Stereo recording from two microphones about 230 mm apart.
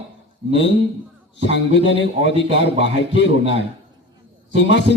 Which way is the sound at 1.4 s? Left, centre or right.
Left.